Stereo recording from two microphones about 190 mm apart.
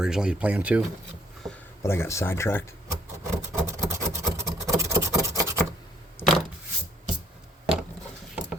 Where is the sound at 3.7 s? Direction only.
15° right (ahead or behind).